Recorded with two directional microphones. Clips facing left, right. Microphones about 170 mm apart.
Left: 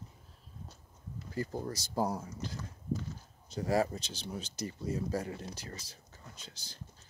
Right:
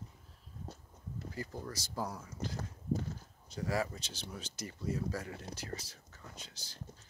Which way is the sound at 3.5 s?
30° left (ahead or behind).